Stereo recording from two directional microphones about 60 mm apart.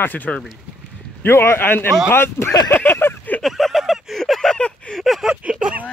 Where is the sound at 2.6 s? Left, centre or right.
Left.